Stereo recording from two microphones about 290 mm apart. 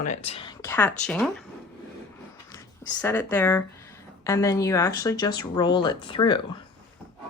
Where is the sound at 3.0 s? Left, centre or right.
Centre.